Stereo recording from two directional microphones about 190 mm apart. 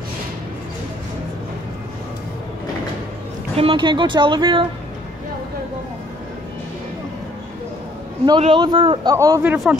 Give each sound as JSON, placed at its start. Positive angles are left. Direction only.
{"t": 3.5, "sound": "speech", "side_deg": -25}
{"t": 8.3, "sound": "speech", "side_deg": -25}